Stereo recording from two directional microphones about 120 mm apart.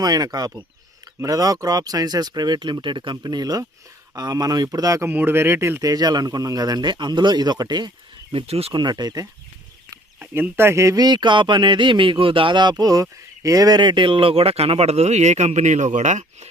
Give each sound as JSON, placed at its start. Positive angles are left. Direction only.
{"t": 0.0, "sound": "speech", "side_deg": -30}
{"t": 5.0, "sound": "speech", "side_deg": -20}
{"t": 8.8, "sound": "speech", "side_deg": -35}
{"t": 10.2, "sound": "speech", "side_deg": -15}